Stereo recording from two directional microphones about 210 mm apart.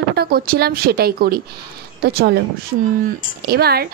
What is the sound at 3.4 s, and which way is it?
Speech, 50° right (ahead or behind).